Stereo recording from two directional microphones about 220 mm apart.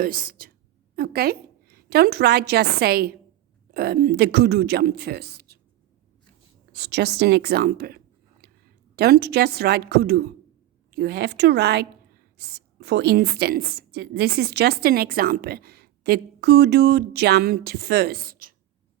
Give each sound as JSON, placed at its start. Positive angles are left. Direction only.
{"t": 0.0, "sound": "a woman's voice", "side_deg": -40}
{"t": 6.7, "sound": "a woman's voice", "side_deg": -50}